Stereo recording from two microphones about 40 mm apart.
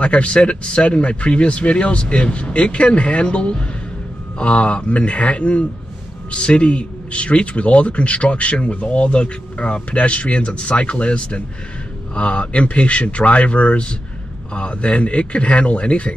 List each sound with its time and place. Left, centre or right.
0.0 s speech: left